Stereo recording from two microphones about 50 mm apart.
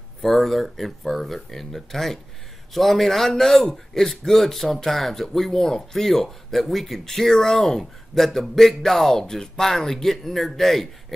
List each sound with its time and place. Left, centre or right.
0.2 s speech: centre